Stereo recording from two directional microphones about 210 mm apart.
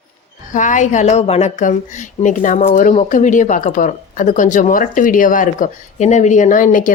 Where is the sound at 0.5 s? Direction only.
35° left (ahead or behind).